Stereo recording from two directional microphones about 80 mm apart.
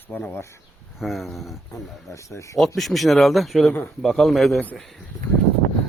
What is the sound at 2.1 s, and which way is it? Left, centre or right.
Speech, left.